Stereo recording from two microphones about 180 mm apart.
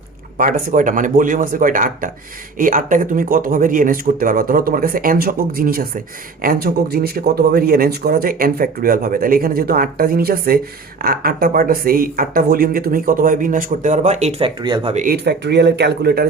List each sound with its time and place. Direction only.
0.3 s speech: 50° right (ahead or behind); by 15.0 s 30° right (ahead or behind)
15.0 s speech: 65° right (ahead or behind)